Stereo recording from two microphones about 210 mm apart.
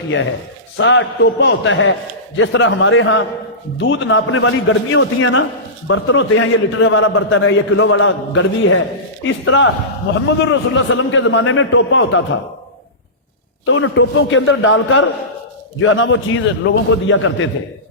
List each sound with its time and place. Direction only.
0.8 s a man's voice: 60° left (ahead or behind)
13.7 s a man's voice: 70° left (ahead or behind)